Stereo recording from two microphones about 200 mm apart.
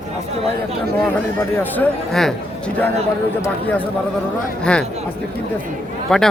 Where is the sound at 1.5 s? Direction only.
10° left (ahead or behind).